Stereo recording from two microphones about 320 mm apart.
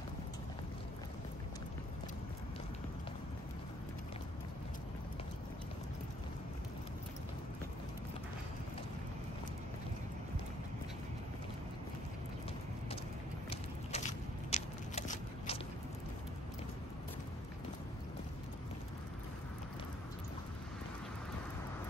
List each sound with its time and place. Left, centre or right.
13.5 s biting: centre